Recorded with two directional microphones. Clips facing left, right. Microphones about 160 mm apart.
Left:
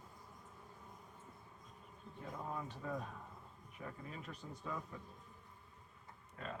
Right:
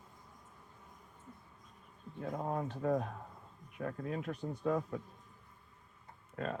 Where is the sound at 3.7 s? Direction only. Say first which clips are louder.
Right 11 dB; 65° right (ahead or behind).